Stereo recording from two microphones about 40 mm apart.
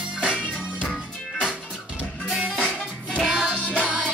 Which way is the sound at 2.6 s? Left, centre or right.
Left.